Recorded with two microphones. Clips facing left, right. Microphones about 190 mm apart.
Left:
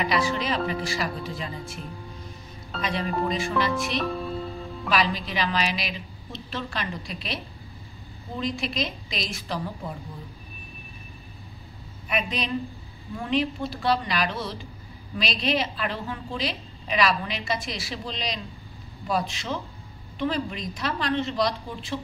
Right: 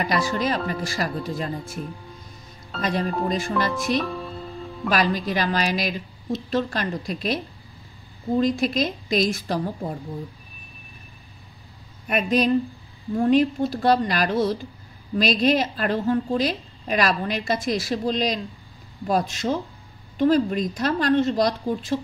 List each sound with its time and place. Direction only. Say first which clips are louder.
0.0 s a woman's voice: right 2 dB; 45° right (ahead or behind)
2.8 s a woman's voice: right 3 dB; 45° right (ahead or behind)
8.4 s a woman's voice: right 7 dB; 45° right (ahead or behind)
12.1 s a woman's voice: right 8 dB; 45° right (ahead or behind)